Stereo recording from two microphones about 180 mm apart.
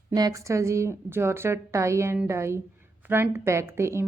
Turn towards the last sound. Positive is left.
turn(degrees=-15)  # may be behind; listen again after turning